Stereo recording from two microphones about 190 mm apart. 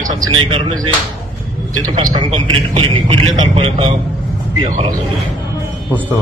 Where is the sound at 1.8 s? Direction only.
25° right (ahead or behind).